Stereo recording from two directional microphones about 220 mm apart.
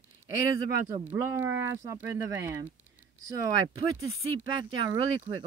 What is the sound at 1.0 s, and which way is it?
Speech, 10° right (ahead or behind).